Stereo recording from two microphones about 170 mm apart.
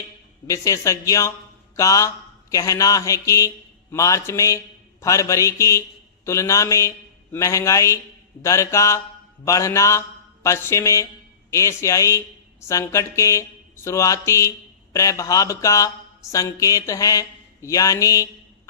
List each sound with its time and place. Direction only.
0.4 s mantra: 20° left (ahead or behind)
6.2 s speech: 15° left (ahead or behind)
14.9 s mantra: 20° left (ahead or behind)